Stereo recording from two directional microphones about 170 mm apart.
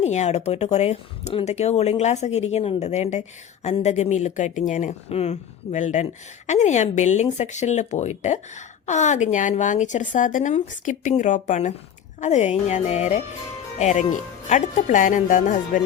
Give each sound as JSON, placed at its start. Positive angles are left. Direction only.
{"t": 0.0, "sound": "speech", "side_deg": 40}